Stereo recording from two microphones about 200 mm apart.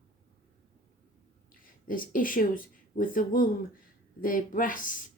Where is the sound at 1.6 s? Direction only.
45° left (ahead or behind).